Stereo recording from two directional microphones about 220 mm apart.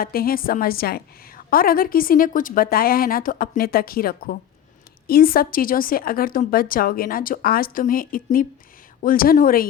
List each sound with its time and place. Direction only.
0.0 s a woman's voice: 40° left (ahead or behind)